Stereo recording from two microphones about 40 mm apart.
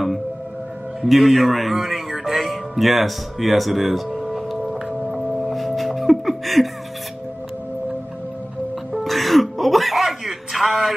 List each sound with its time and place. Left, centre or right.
1.0 s speech: centre
4.7 s music: right
5.1 s music: centre
9.0 s throat clearing: centre